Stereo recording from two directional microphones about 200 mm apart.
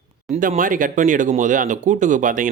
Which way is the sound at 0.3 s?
40° right (ahead or behind).